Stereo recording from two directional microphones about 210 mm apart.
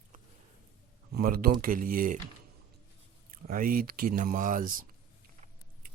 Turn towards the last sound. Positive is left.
turn(degrees=-40)  # may be behind; listen again after turning